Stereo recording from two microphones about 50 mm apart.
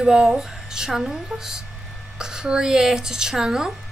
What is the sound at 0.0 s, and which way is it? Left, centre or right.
Speech, centre.